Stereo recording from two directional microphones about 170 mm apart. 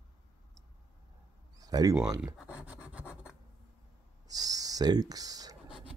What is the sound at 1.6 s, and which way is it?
Speech, 20° right (ahead or behind).